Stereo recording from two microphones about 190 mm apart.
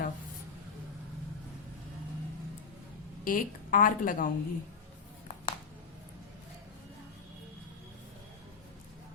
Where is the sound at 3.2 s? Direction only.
45° left (ahead or behind).